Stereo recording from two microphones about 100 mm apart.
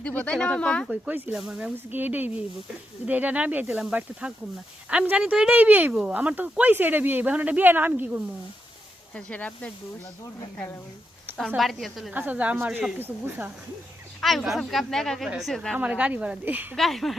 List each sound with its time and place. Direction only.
0.0 s speech: 15° left (ahead or behind)
0.9 s speech: 10° right (ahead or behind)
9.1 s speech: 15° left (ahead or behind)
11.3 s a woman's voice: centre (ahead or behind)
12.1 s speech: 15° right (ahead or behind)
14.2 s a woman's voice: centre (ahead or behind)
15.7 s speech: 10° right (ahead or behind)
16.7 s a woman's voice: centre (ahead or behind)